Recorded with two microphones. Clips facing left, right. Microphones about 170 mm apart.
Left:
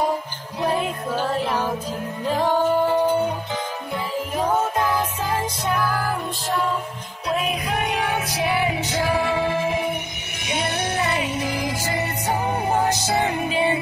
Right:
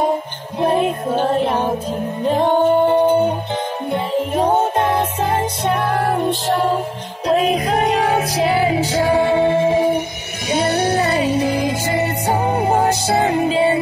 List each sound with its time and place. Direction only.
0.6 s music: 20° right (ahead or behind)